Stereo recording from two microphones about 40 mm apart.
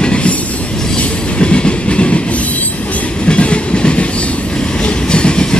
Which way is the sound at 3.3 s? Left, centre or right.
Left.